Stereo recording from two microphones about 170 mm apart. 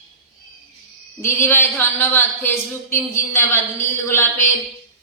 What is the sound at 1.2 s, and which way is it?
A man's voice, 15° left (ahead or behind).